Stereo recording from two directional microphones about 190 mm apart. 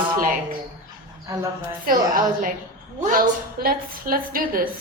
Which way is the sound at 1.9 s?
45° right (ahead or behind).